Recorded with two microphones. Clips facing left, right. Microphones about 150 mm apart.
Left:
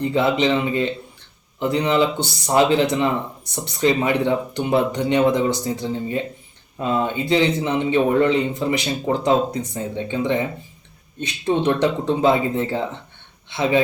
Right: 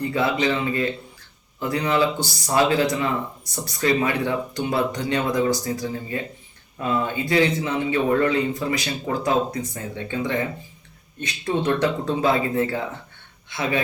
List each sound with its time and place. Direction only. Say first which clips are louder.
0.1 s speech: left 4 dB; 20° left (ahead or behind)
11.4 s speech: left 3 dB; 25° left (ahead or behind)